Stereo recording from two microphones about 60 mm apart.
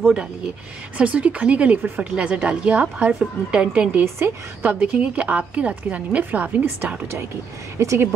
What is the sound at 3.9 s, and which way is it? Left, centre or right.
Speech, right.